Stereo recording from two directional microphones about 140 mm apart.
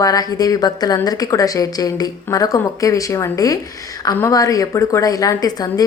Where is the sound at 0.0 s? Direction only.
25° left (ahead or behind).